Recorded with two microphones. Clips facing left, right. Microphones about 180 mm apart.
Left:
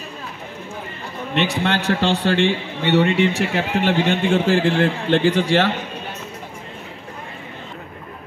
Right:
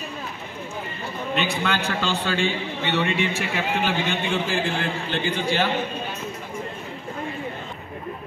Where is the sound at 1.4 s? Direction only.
75° left (ahead or behind).